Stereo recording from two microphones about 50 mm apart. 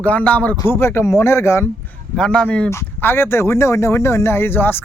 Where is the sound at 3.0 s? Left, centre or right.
Left.